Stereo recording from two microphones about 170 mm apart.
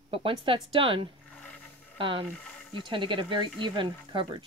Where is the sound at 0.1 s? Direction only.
30° right (ahead or behind).